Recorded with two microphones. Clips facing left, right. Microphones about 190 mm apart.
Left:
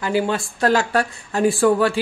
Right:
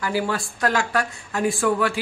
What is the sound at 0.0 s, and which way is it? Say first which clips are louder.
Speech: left 4 dB; 20° left (ahead or behind).